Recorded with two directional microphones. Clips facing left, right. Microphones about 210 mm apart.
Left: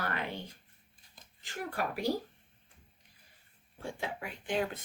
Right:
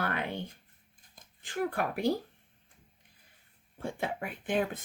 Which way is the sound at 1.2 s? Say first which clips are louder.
Right 9 dB; 55° right (ahead or behind).